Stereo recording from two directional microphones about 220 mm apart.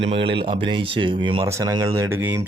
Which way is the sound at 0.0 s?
25° right (ahead or behind).